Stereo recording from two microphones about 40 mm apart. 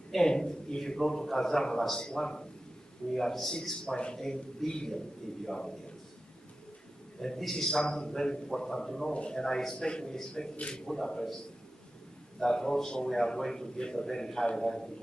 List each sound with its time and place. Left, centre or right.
0.1 s a man's voice: centre
7.2 s a man's voice: centre
9.1 s a man's voice: left
9.4 s a man's voice: centre
12.4 s a man's voice: centre